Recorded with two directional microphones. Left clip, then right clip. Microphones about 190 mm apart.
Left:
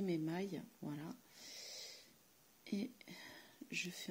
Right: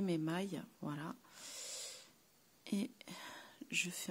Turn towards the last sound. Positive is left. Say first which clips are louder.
# right 5 dB
turn(degrees=-30)  # may be behind; listen again after turning